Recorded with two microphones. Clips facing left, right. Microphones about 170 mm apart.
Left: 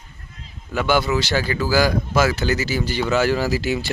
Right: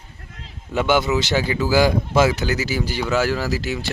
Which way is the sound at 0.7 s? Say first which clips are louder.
Right 1 dB; 20° right (ahead or behind).